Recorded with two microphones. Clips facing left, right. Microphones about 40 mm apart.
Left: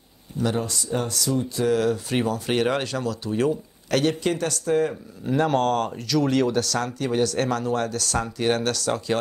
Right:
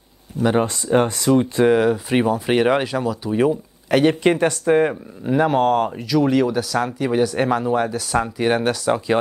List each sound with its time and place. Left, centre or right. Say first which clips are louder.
0.6 s speech: right 9 dB; right
4.1 s speech: right 7 dB; right
5.2 s speech: right 4 dB; centre